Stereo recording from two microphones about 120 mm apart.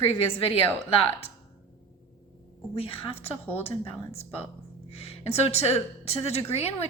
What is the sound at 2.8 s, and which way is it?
Speech, 50° left (ahead or behind).